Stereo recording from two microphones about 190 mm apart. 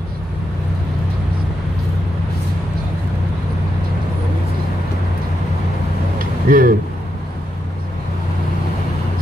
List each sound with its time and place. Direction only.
6.1 s vehicle: 50° right (ahead or behind)